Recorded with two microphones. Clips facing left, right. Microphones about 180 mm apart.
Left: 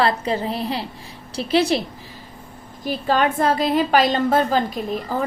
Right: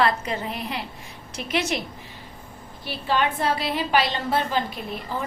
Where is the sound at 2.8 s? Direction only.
45° left (ahead or behind).